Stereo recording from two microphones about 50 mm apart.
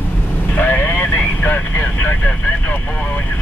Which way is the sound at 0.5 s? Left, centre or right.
Left.